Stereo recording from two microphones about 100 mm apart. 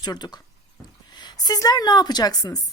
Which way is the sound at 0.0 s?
45° left (ahead or behind).